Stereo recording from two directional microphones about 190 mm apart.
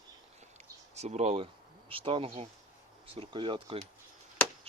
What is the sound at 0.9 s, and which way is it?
Speech, 35° right (ahead or behind).